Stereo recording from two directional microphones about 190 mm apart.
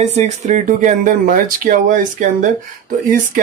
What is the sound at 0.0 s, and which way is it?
Speech, 35° right (ahead or behind).